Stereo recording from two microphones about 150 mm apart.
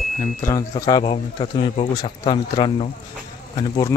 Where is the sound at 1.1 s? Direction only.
40° left (ahead or behind).